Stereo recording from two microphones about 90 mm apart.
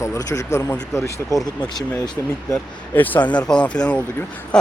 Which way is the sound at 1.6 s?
50° left (ahead or behind).